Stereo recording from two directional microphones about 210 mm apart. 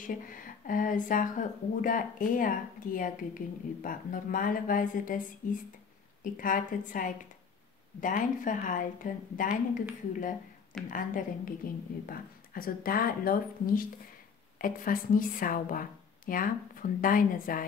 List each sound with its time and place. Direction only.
0.0 s speech: 40° left (ahead or behind)
10.9 s speech: 40° left (ahead or behind)